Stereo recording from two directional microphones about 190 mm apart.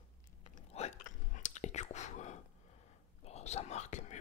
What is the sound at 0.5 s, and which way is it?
Whispering, 40° left (ahead or behind).